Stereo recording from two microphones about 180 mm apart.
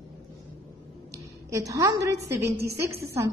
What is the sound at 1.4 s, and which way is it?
A woman's voice, 20° right (ahead or behind).